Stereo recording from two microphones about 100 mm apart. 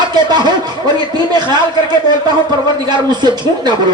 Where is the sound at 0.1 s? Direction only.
45° right (ahead or behind).